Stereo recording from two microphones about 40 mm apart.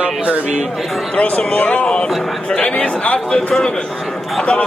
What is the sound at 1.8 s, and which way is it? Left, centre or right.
A man's voice, left.